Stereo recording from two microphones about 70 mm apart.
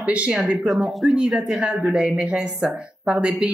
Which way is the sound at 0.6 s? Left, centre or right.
Centre.